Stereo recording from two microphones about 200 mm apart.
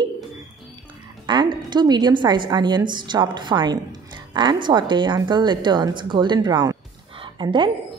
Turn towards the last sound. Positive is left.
turn(degrees=-25)  # may be behind; listen again after turning